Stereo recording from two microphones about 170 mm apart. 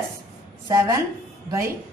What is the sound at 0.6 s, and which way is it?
A woman's voice, 15° right (ahead or behind).